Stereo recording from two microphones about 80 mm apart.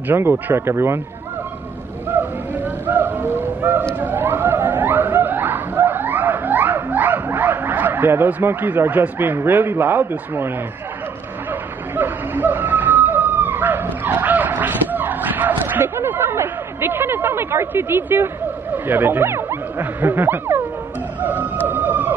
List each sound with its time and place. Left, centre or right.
0.1 s speech: right
2.1 s a sound: right
4.0 s snicker: right
11.9 s howl: right
14.0 s dog: right
21.2 s music: right